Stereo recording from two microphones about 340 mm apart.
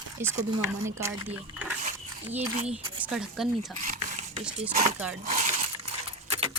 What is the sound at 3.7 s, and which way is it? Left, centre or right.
Drip, right.